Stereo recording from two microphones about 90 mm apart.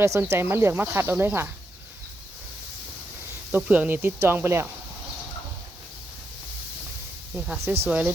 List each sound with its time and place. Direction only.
0.0 s speech: 30° right (ahead or behind)
3.5 s speech: 20° right (ahead or behind)
7.3 s speech: 10° right (ahead or behind)